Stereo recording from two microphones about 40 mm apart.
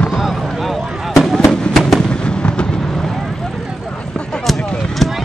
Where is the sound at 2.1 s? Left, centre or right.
Left.